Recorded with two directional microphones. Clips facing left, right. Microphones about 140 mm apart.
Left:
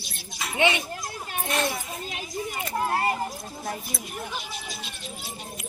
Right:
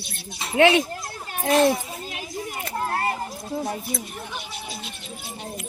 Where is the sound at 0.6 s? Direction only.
90° right.